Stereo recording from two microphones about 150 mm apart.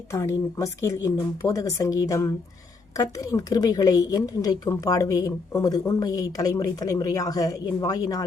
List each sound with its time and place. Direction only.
0.1 s a woman's voice: 20° left (ahead or behind)